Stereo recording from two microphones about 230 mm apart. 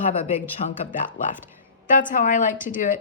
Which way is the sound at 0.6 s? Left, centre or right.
Left.